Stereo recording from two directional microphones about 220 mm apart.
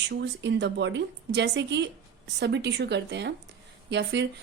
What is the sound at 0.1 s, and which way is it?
A woman's voice, 50° right (ahead or behind).